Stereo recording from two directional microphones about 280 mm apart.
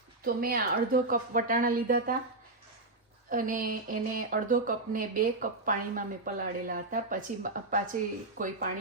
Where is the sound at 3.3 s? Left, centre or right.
Right.